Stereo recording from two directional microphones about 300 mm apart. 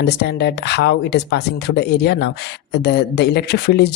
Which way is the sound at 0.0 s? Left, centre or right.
Left.